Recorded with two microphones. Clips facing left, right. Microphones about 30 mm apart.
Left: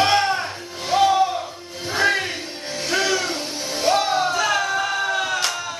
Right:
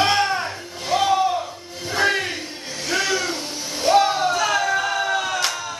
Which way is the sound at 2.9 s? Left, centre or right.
Centre.